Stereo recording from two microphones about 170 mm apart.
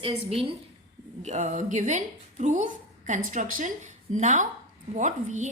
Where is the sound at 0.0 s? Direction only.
35° right (ahead or behind).